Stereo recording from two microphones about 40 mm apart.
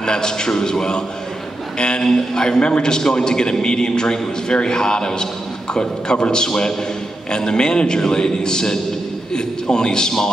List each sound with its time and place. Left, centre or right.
0.0 s a man's voice: centre
2.0 s a man's voice: centre
2.4 s a man's voice: left